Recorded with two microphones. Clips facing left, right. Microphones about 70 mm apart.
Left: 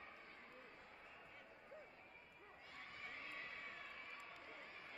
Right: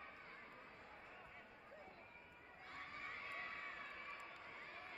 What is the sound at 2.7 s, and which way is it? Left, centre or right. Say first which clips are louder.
Crowd: right 4 dB; right.